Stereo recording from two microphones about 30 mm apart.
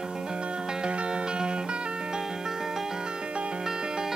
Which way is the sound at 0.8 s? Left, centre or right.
Right.